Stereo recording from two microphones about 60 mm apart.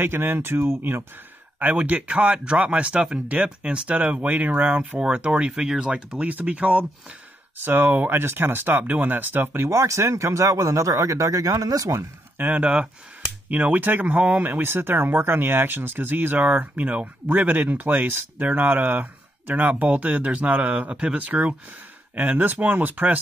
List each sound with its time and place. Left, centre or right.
0.0 s speech: right
1.6 s speech: right
5.0 s speech: centre; by 9.7 s right
9.7 s speech: right
12.4 s speech: right